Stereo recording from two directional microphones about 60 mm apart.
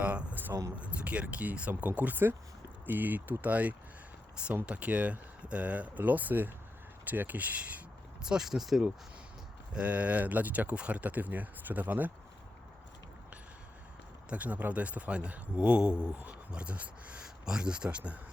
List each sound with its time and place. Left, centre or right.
0.0 s a sound: right
0.8 s speech: right
8.2 s speech: centre
9.7 s speech: right
14.3 s speech: right